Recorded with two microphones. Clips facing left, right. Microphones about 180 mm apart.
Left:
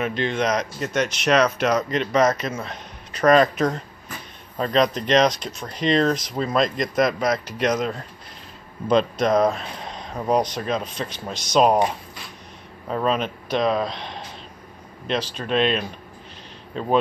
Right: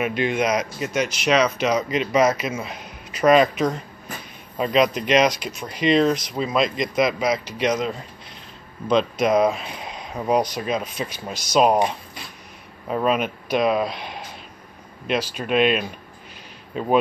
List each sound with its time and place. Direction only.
0.0 s speech: 10° right (ahead or behind)
9.2 s speech: 5° right (ahead or behind)
12.9 s speech: 10° right (ahead or behind)